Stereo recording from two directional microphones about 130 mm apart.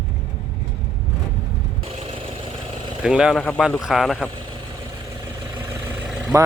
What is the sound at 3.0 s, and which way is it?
Speech, 5° right (ahead or behind).